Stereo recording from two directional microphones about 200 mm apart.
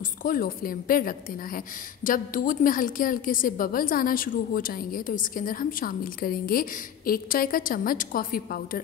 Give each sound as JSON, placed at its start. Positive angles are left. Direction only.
{"t": 0.2, "sound": "a woman's voice", "side_deg": 45}